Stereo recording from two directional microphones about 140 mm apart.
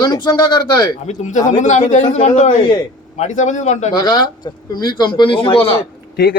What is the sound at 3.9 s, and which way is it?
A man's voice, 30° left (ahead or behind).